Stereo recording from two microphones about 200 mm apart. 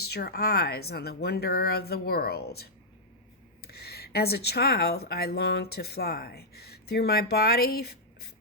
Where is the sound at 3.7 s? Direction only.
50° left (ahead or behind).